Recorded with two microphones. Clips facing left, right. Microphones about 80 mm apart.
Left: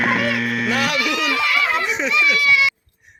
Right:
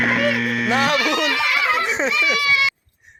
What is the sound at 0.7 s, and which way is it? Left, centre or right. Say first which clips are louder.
A child's voice: right 2 dB; right.